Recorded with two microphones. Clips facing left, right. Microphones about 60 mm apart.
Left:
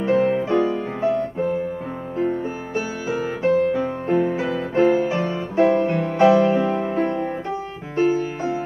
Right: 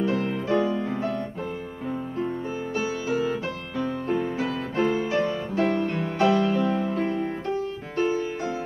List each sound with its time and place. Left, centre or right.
0.0 s music: left
7.9 s music: centre